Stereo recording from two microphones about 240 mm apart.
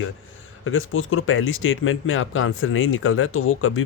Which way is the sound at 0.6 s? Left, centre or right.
Left.